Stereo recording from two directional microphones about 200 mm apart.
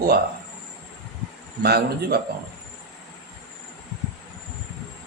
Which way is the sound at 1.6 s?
50° right (ahead or behind).